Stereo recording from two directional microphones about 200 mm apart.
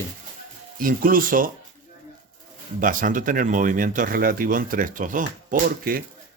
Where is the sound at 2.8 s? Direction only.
40° right (ahead or behind).